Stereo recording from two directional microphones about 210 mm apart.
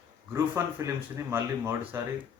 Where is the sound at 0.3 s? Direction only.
15° right (ahead or behind).